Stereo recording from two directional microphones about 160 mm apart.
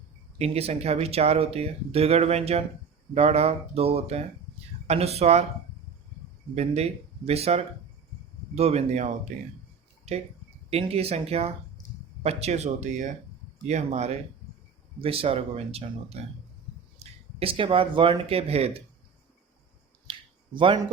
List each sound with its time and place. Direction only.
0.3 s speech: 40° right (ahead or behind)
6.6 s speech: 40° right (ahead or behind)
10.7 s speech: 40° right (ahead or behind)
20.1 s finger snapping: 30° right (ahead or behind)